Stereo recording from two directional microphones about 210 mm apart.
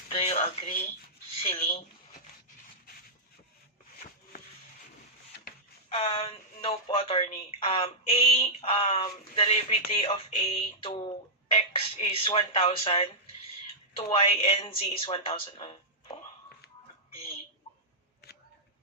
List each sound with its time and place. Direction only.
0.1 s a sound: 30° left (ahead or behind)
1.4 s speech: 30° left (ahead or behind)
5.9 s speech: 30° left (ahead or behind)